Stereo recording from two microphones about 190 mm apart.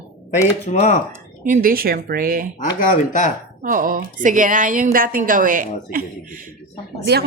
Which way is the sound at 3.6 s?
45° right (ahead or behind).